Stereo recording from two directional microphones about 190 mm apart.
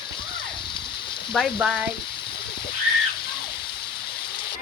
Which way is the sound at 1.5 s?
Centre (ahead or behind).